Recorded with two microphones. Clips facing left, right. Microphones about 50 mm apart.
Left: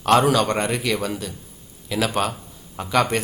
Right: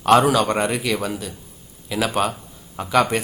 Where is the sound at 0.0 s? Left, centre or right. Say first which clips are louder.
Right 2 dB; centre.